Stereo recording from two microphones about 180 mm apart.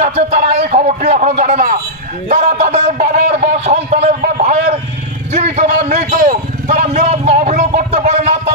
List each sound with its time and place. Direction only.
0.0 s a man's voice: 40° right (ahead or behind)
5.3 s vehicle: 40° right (ahead or behind)